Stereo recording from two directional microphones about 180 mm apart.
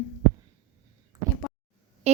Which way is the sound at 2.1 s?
35° right (ahead or behind).